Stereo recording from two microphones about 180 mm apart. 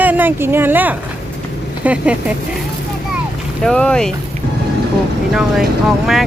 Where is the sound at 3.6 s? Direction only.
5° left (ahead or behind).